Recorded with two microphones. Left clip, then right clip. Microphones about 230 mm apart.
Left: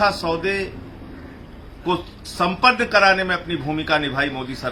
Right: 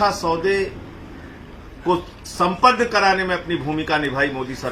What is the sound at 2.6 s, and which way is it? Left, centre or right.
A man's voice, centre.